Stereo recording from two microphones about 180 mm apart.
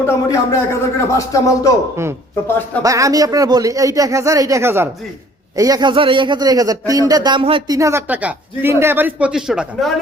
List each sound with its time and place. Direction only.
0.0 s speech: 15° left (ahead or behind)
2.8 s speech: 20° right (ahead or behind)
7.8 s speech: 15° right (ahead or behind)